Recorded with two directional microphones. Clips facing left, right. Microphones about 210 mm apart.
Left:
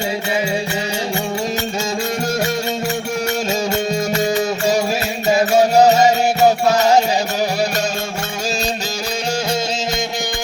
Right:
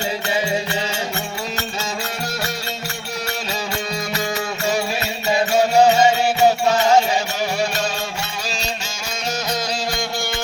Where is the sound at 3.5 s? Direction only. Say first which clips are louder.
Left 6 dB; 45° left (ahead or behind).